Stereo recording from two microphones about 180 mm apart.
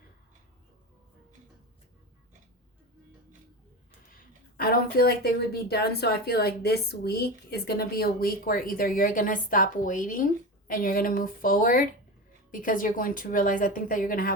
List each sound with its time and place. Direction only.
4.2 s a woman's voice: 55° left (ahead or behind)